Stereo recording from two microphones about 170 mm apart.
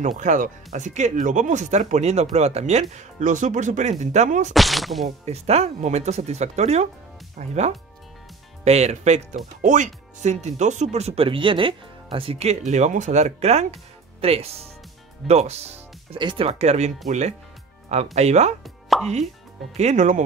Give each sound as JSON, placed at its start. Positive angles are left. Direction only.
{"t": 0.2, "sound": "speech", "side_deg": -45}
{"t": 4.6, "sound": "speech", "side_deg": 0}
{"t": 5.2, "sound": "speech", "side_deg": -40}
{"t": 18.1, "sound": "speech", "side_deg": -40}
{"t": 18.6, "sound": "plop", "side_deg": 0}
{"t": 19.8, "sound": "speech", "side_deg": -45}